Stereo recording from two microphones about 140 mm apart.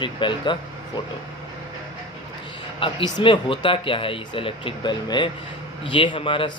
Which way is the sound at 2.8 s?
35° left (ahead or behind).